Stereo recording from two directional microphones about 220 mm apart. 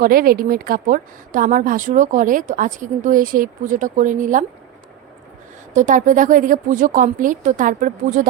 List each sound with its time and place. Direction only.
0.0 s a woman's voice: 40° right (ahead or behind)
5.7 s a woman's voice: 35° right (ahead or behind)